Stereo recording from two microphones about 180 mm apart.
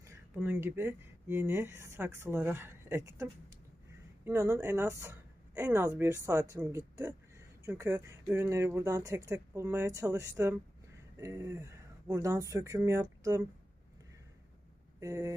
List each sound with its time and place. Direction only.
0.0 s speech: 15° right (ahead or behind)
4.3 s speech: 15° right (ahead or behind)
15.0 s speech: 15° right (ahead or behind)